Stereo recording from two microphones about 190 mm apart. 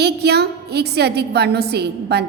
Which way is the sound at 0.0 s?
60° right (ahead or behind).